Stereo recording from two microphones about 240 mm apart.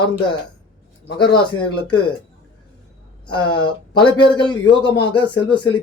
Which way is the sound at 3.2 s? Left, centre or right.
Centre.